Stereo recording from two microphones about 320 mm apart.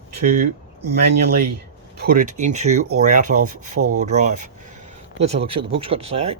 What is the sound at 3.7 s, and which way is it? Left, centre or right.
Speech, right.